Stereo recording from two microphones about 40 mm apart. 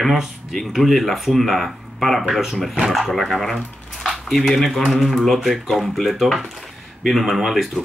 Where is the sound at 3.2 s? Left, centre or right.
Centre.